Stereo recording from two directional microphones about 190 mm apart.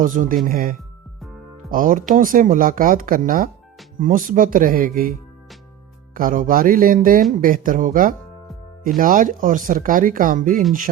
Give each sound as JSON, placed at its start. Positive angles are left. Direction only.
{"t": 0.0, "sound": "speech", "side_deg": -45}
{"t": 6.1, "sound": "speech", "side_deg": -45}